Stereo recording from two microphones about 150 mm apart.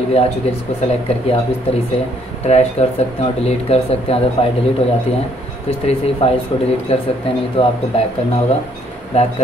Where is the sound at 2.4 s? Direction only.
45° left (ahead or behind).